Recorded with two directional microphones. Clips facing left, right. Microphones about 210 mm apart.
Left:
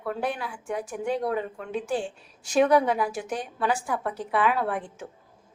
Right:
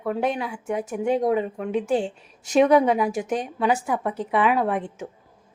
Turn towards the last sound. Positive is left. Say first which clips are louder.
# right 5 dB
turn(degrees=-20)  # may be behind; listen again after turning